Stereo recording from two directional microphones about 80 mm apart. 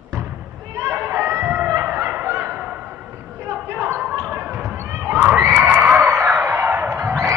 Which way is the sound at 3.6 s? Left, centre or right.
Right.